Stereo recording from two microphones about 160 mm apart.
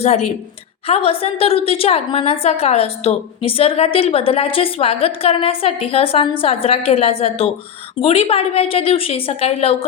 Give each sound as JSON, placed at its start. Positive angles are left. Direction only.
{"t": 0.0, "sound": "a woman's voice", "side_deg": 45}